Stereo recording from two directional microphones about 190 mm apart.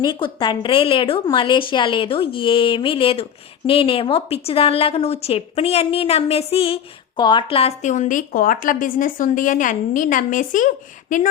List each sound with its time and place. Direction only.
0.0 s a woman's voice: 25° left (ahead or behind); by 11.3 s 45° left (ahead or behind)